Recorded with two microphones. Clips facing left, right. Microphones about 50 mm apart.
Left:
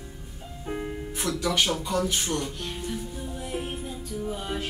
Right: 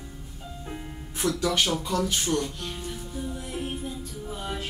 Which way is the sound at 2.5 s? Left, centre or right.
Centre.